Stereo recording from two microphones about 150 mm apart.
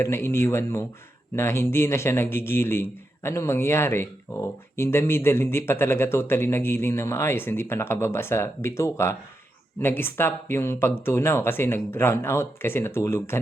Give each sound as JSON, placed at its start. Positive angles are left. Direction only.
{"t": 0.0, "sound": "speech", "side_deg": 15}